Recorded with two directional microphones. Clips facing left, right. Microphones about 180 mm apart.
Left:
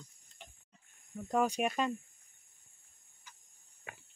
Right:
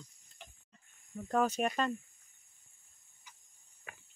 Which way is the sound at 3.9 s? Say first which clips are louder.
Left 3 dB; 25° left (ahead or behind).